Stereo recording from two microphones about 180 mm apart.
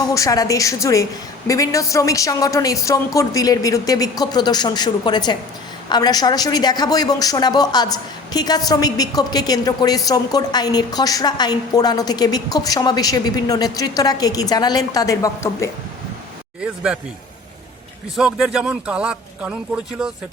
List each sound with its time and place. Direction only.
0.1 s a woman's voice: 20° left (ahead or behind)
18.2 s a man's voice: 5° right (ahead or behind)